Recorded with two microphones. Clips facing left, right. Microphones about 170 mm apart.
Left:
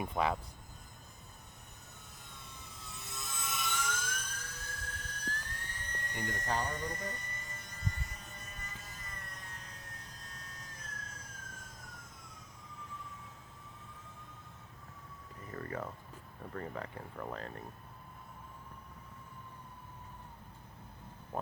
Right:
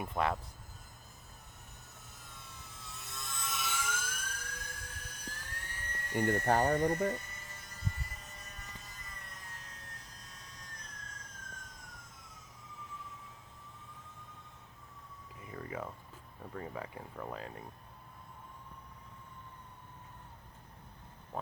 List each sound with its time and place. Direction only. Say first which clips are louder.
0.0 s speech: even; centre (ahead or behind)
2.3 s vehicle: left 1 dB; centre (ahead or behind)
6.2 s speech: right 8 dB; 60° right (ahead or behind)
7.1 s vehicle: right 6 dB; 5° right (ahead or behind)
15.4 s a sound: left 1 dB; 10° right (ahead or behind)
16.4 s speech: left 1 dB; 10° right (ahead or behind)